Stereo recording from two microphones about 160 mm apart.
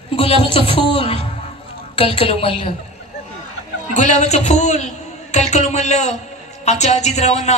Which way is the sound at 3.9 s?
50° left (ahead or behind).